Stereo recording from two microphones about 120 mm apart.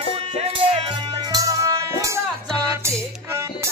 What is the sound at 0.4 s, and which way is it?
Music, 50° right (ahead or behind).